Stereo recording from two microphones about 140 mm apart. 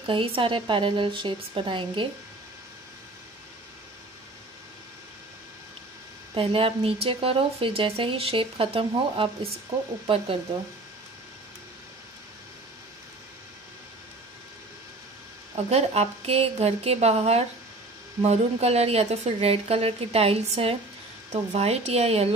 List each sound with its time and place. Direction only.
0.0 s speech: 40° right (ahead or behind)
6.3 s speech: 40° right (ahead or behind)
15.5 s speech: 50° right (ahead or behind)